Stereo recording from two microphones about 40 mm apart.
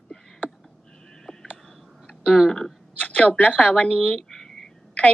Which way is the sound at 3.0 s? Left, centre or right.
Left.